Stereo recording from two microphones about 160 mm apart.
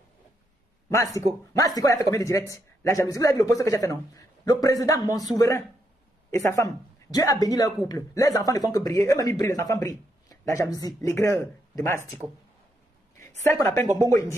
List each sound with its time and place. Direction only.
0.8 s speech: 20° left (ahead or behind)
6.3 s speech: 20° left (ahead or behind)
13.2 s speech: 15° left (ahead or behind)